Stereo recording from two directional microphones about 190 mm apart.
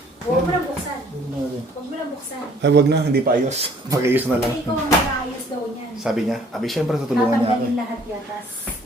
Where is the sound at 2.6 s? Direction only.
65° right (ahead or behind).